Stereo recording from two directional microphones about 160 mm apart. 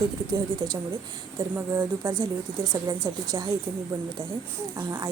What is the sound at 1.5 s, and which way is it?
A woman's voice, 20° right (ahead or behind).